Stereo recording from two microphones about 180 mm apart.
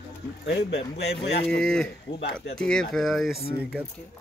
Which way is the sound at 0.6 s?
70° left (ahead or behind).